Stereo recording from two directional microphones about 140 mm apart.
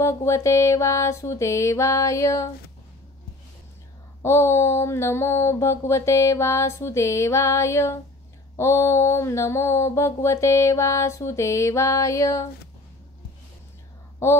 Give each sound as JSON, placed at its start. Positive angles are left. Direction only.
{"t": 0.0, "sound": "mantra", "side_deg": 20}
{"t": 4.2, "sound": "mantra", "side_deg": 20}
{"t": 14.2, "sound": "mantra", "side_deg": 20}